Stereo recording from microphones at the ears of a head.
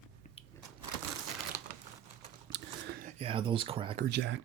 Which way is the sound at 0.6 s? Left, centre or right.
Right.